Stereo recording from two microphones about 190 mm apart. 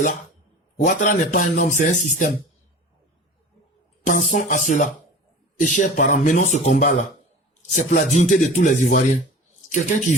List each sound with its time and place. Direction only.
0.9 s speech: 40° left (ahead or behind)
4.0 s speech: 40° left (ahead or behind)